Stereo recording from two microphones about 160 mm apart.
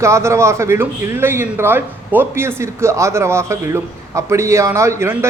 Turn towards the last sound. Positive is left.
turn(degrees=-15)  # may be behind; listen again after turning